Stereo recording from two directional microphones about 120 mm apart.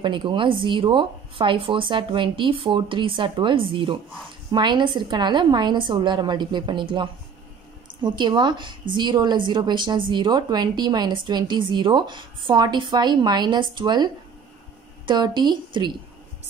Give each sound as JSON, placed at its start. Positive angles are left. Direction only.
{"t": 0.0, "sound": "a woman's voice", "side_deg": -45}